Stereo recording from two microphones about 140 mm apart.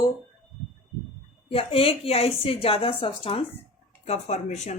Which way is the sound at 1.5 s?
40° left (ahead or behind).